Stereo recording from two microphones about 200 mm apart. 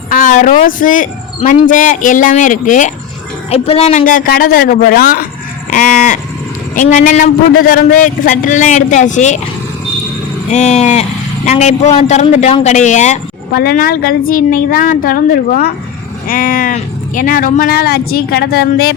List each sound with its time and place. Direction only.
0.1 s a man's voice: 40° left (ahead or behind)
6.7 s a man's voice: 40° left (ahead or behind)
10.5 s a man's voice: 35° left (ahead or behind)
13.5 s speech: 50° left (ahead or behind)